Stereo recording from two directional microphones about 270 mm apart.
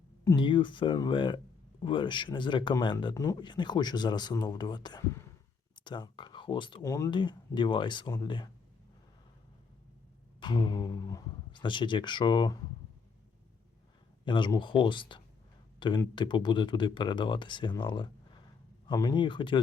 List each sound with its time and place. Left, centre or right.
0.3 s speech: centre
10.4 s speech: centre
14.3 s speech: centre